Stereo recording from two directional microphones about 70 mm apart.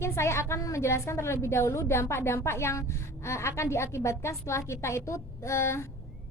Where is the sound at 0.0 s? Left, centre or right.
Left.